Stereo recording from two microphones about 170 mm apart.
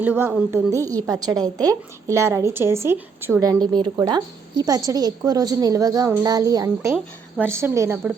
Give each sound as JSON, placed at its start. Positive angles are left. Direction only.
{"t": 0.0, "sound": "a woman's voice", "side_deg": -10}
{"t": 3.6, "sound": "a woman's voice", "side_deg": -25}